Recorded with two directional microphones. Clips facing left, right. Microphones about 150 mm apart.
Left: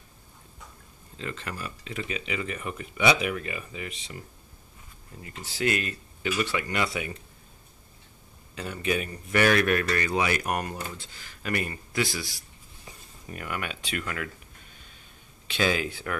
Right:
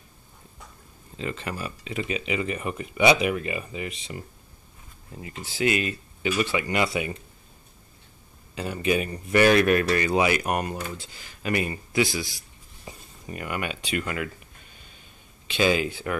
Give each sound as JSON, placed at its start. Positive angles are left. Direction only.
{"t": 1.1, "sound": "speech", "side_deg": -10}
{"t": 5.2, "sound": "speech", "side_deg": -5}
{"t": 8.5, "sound": "speech", "side_deg": -15}
{"t": 9.3, "sound": "speech", "side_deg": -25}
{"t": 12.0, "sound": "speech", "side_deg": 0}
{"t": 13.3, "sound": "speech", "side_deg": -10}
{"t": 15.4, "sound": "speech", "side_deg": 0}